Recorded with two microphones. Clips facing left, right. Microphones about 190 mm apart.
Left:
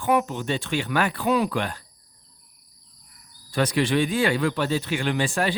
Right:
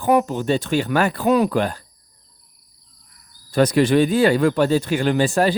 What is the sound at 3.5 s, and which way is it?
Speech, 40° right (ahead or behind).